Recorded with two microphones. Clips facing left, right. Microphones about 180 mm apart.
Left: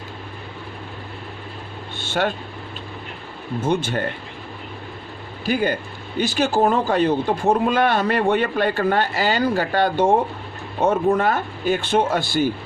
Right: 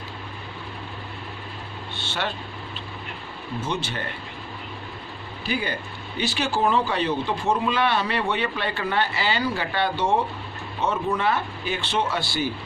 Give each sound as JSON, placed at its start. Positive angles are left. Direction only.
{"t": 2.0, "sound": "vehicle", "side_deg": 50}
{"t": 3.6, "sound": "a man's voice", "side_deg": 50}
{"t": 5.5, "sound": "a man's voice", "side_deg": 45}